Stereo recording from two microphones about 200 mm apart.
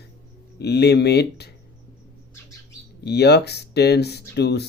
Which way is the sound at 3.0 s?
55° left (ahead or behind).